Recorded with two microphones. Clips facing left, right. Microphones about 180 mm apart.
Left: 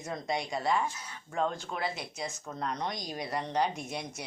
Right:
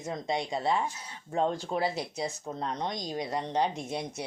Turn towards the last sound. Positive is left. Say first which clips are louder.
# right 3 dB
turn(degrees=-25)  # may be behind; listen again after turning